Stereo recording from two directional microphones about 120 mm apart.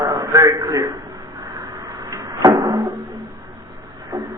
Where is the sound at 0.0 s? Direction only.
30° right (ahead or behind).